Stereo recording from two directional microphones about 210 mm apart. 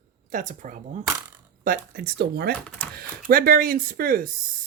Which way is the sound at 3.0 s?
45° right (ahead or behind).